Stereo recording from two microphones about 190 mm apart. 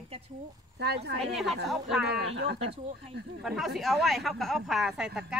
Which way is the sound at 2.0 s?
60° right (ahead or behind).